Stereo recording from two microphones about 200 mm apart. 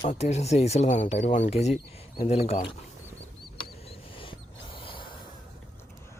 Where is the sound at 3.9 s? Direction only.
25° left (ahead or behind).